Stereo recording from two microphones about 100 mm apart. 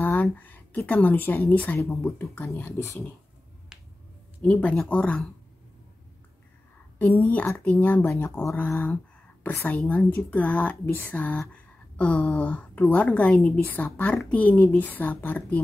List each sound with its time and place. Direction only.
0.0 s a woman's voice: 15° left (ahead or behind)
4.4 s speech: 15° left (ahead or behind)
7.0 s speech: 15° left (ahead or behind)
8.1 s speech: 30° left (ahead or behind)